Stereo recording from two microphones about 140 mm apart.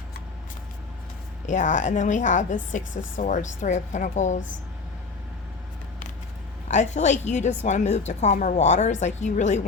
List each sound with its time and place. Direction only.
1.5 s a woman's voice: 60° left (ahead or behind)
6.7 s a woman's voice: 55° left (ahead or behind)